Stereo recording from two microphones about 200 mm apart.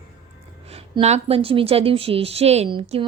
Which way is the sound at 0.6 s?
30° right (ahead or behind).